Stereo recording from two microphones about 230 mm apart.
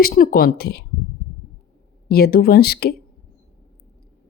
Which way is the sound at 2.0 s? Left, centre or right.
Left.